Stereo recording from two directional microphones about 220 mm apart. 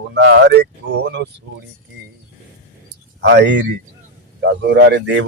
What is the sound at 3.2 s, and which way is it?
Speech, 50° right (ahead or behind).